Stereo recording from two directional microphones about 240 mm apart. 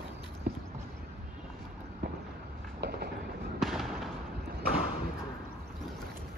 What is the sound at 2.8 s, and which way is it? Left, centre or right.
Train, right.